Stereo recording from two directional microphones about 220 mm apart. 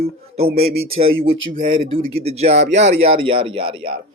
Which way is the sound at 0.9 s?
25° right (ahead or behind).